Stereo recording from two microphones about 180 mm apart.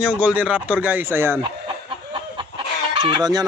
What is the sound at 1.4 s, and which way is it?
Chicken, 25° right (ahead or behind).